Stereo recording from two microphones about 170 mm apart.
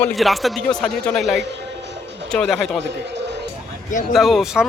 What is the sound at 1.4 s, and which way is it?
Music, 90° right.